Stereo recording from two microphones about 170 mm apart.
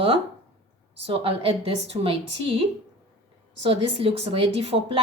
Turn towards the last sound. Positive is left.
turn(degrees=-35)  # may be behind; listen again after turning